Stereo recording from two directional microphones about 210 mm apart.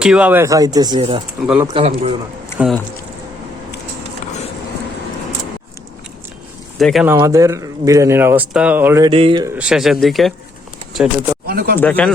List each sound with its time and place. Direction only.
0.0 s speech: 5° right (ahead or behind); by 1.9 s 25° right (ahead or behind)
2.6 s speech: centre (ahead or behind)
6.7 s speech: centre (ahead or behind)
7.1 s speech: 15° right (ahead or behind)
9.0 s speech: 25° right (ahead or behind)
9.6 s speech: centre (ahead or behind)
11.4 s speech: 45° right (ahead or behind)
11.8 s speech: 5° left (ahead or behind)